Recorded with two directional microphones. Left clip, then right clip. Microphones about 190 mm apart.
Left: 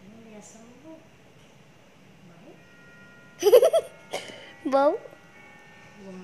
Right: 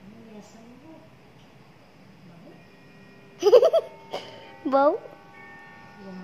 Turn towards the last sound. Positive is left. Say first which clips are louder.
# right 1 dB
turn(degrees=5)  # may be behind; listen again after turning